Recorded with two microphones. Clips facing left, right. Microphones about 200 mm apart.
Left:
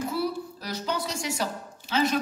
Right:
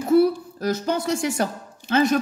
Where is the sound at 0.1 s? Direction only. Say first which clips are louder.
Right 12 dB; 50° right (ahead or behind).